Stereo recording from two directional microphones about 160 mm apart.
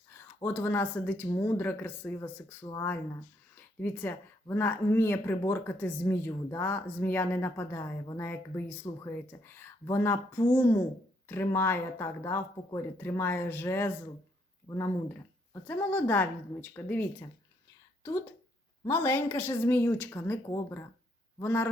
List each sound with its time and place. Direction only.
0.4 s speech: 15° left (ahead or behind)
14.7 s speech: 25° left (ahead or behind)
15.6 s speech: 10° left (ahead or behind)
18.9 s speech: 15° left (ahead or behind)